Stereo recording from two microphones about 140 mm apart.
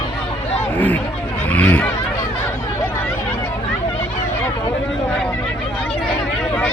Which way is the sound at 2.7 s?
15° left (ahead or behind).